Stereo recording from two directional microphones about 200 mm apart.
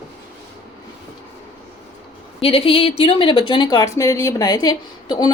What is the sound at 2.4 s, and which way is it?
Speech, 25° left (ahead or behind).